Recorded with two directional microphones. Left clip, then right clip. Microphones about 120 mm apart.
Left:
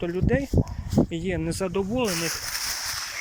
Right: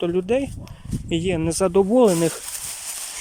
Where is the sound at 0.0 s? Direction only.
25° right (ahead or behind).